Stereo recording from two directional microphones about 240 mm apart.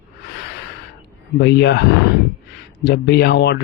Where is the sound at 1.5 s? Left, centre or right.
Left.